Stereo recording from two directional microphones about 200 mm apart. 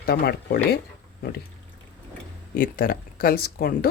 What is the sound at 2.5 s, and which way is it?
Speech, 45° left (ahead or behind).